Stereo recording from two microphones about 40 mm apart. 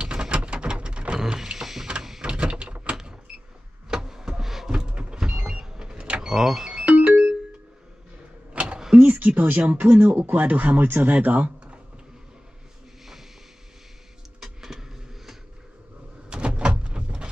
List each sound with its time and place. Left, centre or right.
0.0 s a sound: right
1.2 s power windows: centre
2.2 s a sound: right
3.9 s a sound: centre
4.7 s vehicle: centre
6.2 s vehicle: centre
6.8 s ringtone: right
8.5 s mechanisms: right
9.2 s speech: right
10.1 s speech: right
10.5 s speech: right
14.4 s vehicle: centre
16.3 s door: right